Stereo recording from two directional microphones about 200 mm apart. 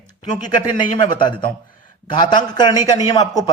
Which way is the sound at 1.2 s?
25° left (ahead or behind).